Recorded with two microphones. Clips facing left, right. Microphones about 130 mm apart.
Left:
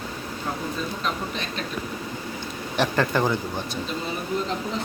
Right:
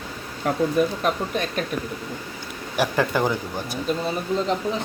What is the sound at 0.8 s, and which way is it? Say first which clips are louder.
Speech: right 7 dB; 55° right (ahead or behind).